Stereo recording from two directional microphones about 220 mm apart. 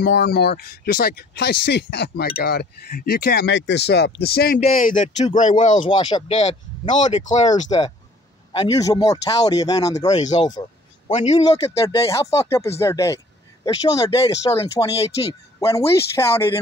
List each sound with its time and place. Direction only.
0.0 s speech: 45° left (ahead or behind)
5.8 s speech: 20° left (ahead or behind)
8.5 s a man's voice: 15° left (ahead or behind); by 11.3 s 30° left (ahead or behind)
11.3 s speech: 15° left (ahead or behind)